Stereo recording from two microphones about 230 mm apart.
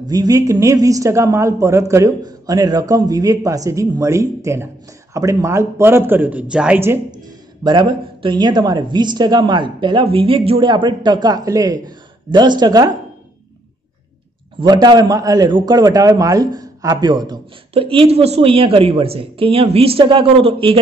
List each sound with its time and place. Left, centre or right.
0.0 s a woman's voice: centre
7.2 s a man's voice: centre
14.6 s a man's voice: centre